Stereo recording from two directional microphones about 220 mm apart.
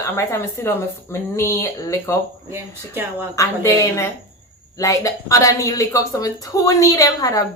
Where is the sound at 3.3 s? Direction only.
15° left (ahead or behind).